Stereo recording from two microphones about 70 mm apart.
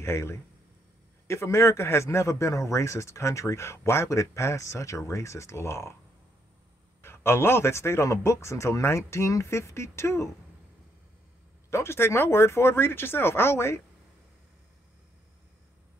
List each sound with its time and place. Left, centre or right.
0.0 s a man's voice: left
7.0 s a man's voice: left
11.7 s a man's voice: left